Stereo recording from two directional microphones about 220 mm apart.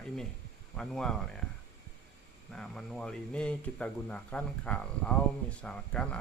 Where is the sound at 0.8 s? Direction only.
Centre (ahead or behind).